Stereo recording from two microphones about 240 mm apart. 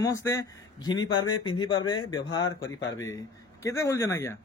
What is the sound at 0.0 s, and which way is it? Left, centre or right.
A man's voice, centre.